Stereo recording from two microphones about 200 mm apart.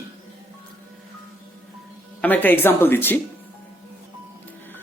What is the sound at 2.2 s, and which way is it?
Speech, 10° left (ahead or behind).